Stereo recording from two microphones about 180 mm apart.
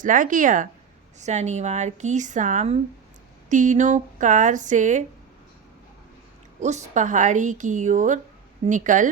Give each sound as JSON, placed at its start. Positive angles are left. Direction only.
{"t": 0.0, "sound": "a woman's voice", "side_deg": -45}
{"t": 6.6, "sound": "a woman's voice", "side_deg": -40}